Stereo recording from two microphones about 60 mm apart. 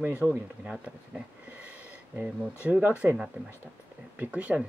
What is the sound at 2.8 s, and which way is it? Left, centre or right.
Speech, right.